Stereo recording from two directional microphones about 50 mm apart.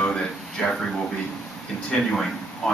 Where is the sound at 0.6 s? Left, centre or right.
Left.